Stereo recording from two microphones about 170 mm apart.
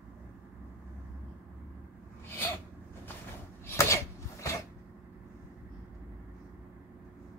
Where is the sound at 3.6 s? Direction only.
15° left (ahead or behind).